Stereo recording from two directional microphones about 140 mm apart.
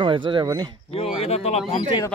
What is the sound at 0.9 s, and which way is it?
Speech, 50° left (ahead or behind).